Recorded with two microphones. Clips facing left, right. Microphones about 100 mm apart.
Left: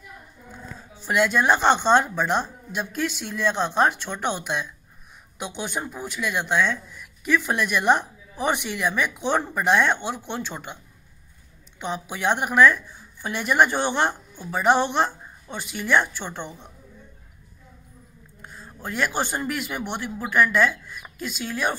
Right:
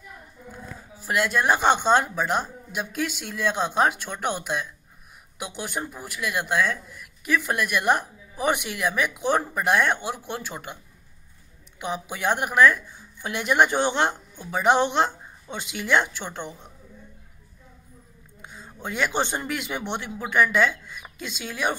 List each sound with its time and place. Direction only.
1.0 s a woman's voice: 5° right (ahead or behind)
13.2 s a woman's voice: 15° right (ahead or behind)
18.4 s a man's voice: 20° right (ahead or behind)